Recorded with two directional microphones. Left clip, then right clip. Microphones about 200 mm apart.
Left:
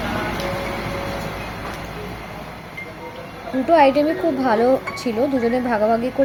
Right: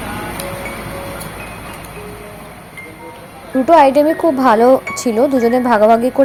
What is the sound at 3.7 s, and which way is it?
A woman's voice, 20° right (ahead or behind).